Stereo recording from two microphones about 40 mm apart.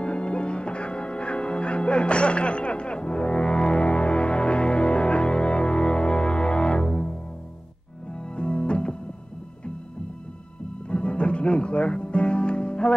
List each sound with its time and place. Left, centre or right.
0.0 s music: left
10.9 s music: left